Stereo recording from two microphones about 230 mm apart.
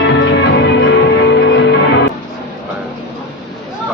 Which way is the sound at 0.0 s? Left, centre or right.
Left.